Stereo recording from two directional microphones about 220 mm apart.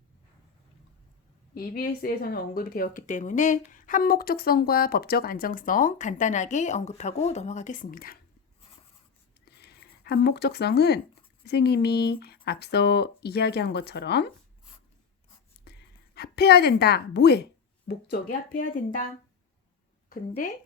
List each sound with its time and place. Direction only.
1.5 s speech: 40° left (ahead or behind)
9.6 s speech: 45° left (ahead or behind)
15.7 s dog: 50° left (ahead or behind)
16.1 s speech: 45° left (ahead or behind)